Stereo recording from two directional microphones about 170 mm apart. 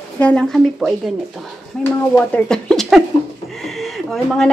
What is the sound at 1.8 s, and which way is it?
A woman's voice, 10° left (ahead or behind).